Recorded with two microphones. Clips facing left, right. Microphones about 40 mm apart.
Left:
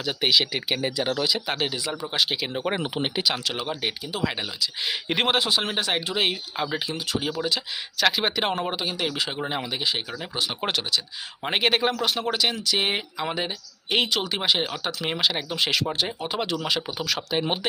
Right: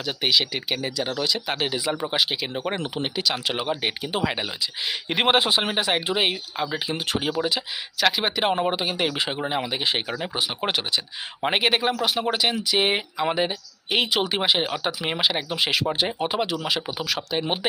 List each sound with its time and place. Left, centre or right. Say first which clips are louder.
0.0 s speech: even; centre
2.3 s speech: left 1 dB; centre
3.4 s speech: right 3 dB; centre
4.9 s speech: right 1 dB; centre
5.2 s speech: right 4 dB; right
5.7 s speech: right 2 dB; centre
7.2 s speech: right 1 dB; centre
8.0 s speech: right 1 dB; centre